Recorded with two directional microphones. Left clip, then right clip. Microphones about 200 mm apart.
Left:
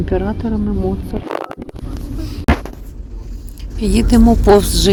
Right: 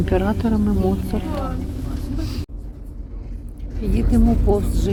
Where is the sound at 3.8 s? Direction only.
25° left (ahead or behind).